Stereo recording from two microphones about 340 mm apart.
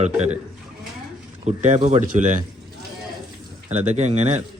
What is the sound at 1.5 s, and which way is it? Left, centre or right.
Speech, right.